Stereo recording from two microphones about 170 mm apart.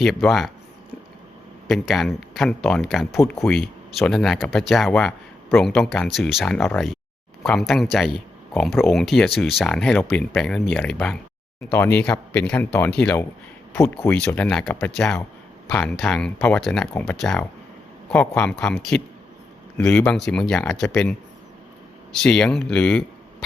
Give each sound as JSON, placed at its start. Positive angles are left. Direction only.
{"t": 0.0, "sound": "speech", "side_deg": 0}
{"t": 1.6, "sound": "speech", "side_deg": 0}
{"t": 3.2, "sound": "speech", "side_deg": 20}
{"t": 3.4, "sound": "speech", "side_deg": 0}